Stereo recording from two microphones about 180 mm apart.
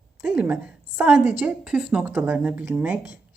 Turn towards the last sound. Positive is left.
turn(degrees=-5)  # may be behind; listen again after turning